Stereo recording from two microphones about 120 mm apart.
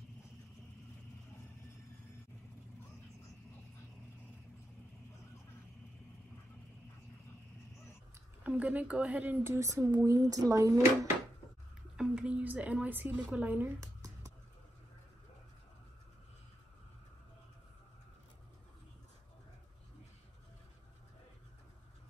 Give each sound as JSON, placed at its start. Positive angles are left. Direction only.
{"t": 8.5, "sound": "speech", "side_deg": -10}
{"t": 12.0, "sound": "a woman's voice", "side_deg": -10}
{"t": 13.7, "sound": "a sound", "side_deg": -30}